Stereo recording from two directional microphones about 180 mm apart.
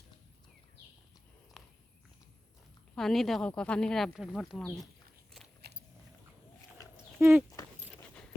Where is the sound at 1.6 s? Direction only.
Centre (ahead or behind).